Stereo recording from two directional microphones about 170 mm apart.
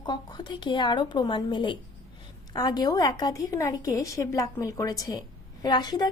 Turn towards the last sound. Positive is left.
turn(degrees=25)  # may be behind; listen again after turning